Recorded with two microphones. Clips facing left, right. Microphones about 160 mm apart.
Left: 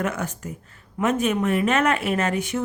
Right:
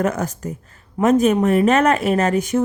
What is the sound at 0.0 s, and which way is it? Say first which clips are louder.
A woman's voice: right 6 dB; 40° right (ahead or behind).